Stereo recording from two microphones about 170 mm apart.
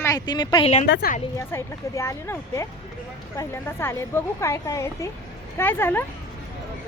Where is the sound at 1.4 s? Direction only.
15° left (ahead or behind).